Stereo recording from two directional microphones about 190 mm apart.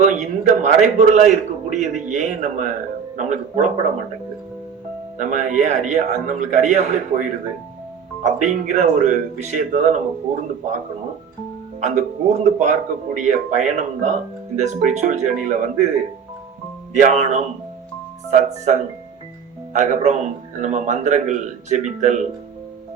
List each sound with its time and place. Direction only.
0.0 s a man's voice: 40° right (ahead or behind)
5.1 s a man's voice: 40° right (ahead or behind)
11.8 s a man's voice: 40° right (ahead or behind)
16.9 s a man's voice: 40° right (ahead or behind)